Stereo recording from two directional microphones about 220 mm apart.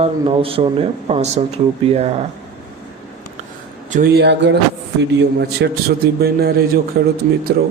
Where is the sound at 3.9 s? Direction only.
45° right (ahead or behind).